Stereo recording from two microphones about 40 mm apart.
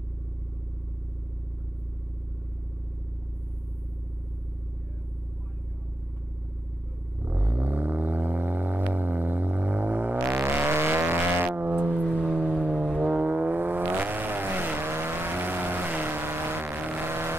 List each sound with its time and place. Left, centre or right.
7.2 s vehicle: right
10.6 s vehicle: right
11.4 s vehicle: right
11.7 s vehicle: right
12.9 s vehicle: right
14.9 s vehicle: right
16.6 s vehicle: right
17.1 s vehicle: right